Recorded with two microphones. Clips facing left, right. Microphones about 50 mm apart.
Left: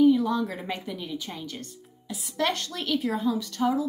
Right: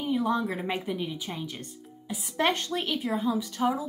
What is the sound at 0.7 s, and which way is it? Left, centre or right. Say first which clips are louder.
A woman's voice: right 2 dB; right.